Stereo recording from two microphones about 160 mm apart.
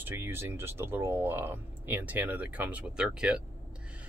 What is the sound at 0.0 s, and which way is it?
Speech, 15° right (ahead or behind).